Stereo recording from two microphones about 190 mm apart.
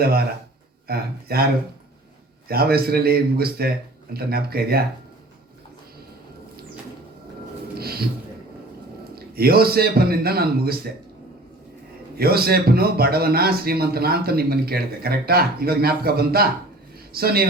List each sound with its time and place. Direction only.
0.0 s a man's voice: 55° right (ahead or behind)
2.5 s a man's voice: 55° right (ahead or behind)
7.8 s music: 55° right (ahead or behind)
9.1 s a man's voice: 55° right (ahead or behind)
12.1 s a man's voice: 55° right (ahead or behind)